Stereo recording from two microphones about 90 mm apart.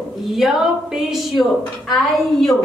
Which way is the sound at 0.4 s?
5° right (ahead or behind).